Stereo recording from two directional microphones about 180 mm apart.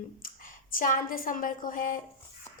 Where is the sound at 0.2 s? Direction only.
50° left (ahead or behind).